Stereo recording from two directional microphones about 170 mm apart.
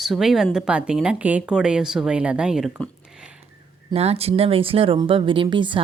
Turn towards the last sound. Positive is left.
turn(degrees=-30)  # may be behind; listen again after turning